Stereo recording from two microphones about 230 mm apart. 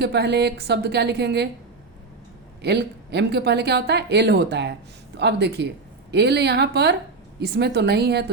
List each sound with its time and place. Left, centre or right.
0.0 s a woman's voice: right
2.6 s a woman's voice: right